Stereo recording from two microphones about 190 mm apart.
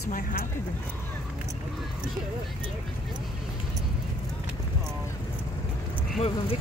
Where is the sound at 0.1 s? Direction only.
45° left (ahead or behind).